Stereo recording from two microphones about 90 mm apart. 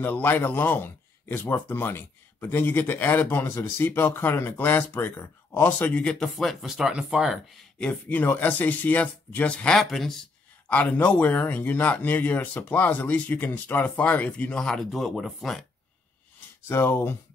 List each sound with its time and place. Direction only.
0.0 s a man's voice: 20° left (ahead or behind); by 7.6 s 5° right (ahead or behind)
7.8 s speech: 20° left (ahead or behind); by 10.2 s 5° left (ahead or behind)
10.7 s a man's voice: 15° left (ahead or behind)
14.6 s speech: 5° left (ahead or behind)
16.6 s a man's voice: 25° left (ahead or behind)